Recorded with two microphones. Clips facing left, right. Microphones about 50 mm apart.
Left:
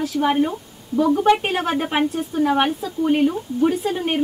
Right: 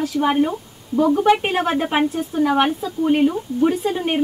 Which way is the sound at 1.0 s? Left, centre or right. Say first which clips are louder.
Right 1 dB; centre.